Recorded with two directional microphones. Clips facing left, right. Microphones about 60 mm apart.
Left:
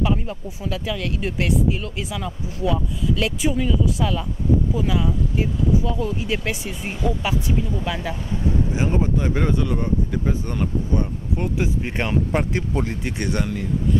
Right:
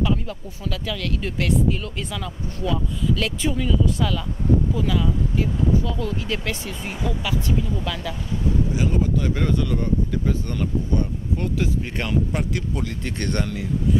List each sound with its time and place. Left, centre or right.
0.0 s speech: left
13.0 s speech: centre